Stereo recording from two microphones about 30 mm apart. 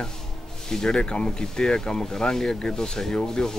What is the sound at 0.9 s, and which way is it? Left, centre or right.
Speech, left.